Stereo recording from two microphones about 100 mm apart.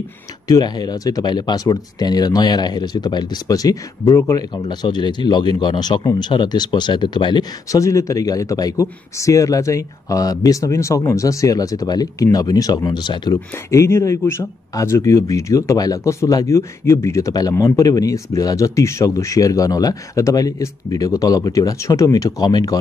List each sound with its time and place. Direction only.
0.5 s speech: 45° left (ahead or behind)
7.7 s speech: 35° left (ahead or behind)
13.7 s speech: 30° left (ahead or behind)